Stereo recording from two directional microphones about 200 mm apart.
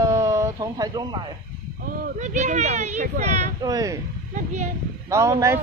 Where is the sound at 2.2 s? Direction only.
40° right (ahead or behind).